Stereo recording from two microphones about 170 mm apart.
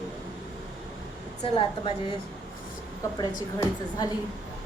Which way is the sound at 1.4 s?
30° left (ahead or behind).